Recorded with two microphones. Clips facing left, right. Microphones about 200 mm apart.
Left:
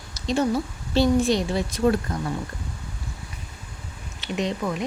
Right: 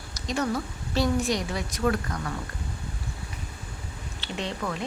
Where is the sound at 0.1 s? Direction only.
25° left (ahead or behind).